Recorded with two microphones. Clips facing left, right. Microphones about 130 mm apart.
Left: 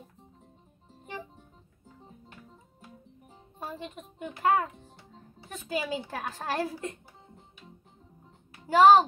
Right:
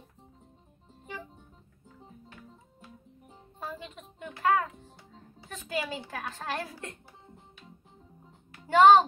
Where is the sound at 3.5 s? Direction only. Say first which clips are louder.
Left 1 dB; 20° left (ahead or behind).